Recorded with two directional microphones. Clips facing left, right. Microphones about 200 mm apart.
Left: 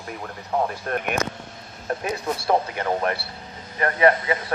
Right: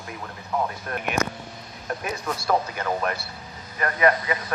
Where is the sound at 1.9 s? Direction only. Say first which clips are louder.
Left 3 dB; 30° left (ahead or behind).